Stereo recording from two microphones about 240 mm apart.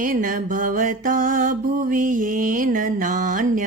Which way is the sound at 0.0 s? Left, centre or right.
Right.